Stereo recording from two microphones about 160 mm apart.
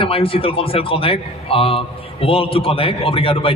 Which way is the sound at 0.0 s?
35° left (ahead or behind).